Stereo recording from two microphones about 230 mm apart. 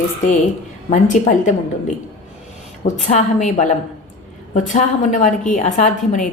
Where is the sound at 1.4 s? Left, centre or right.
Left.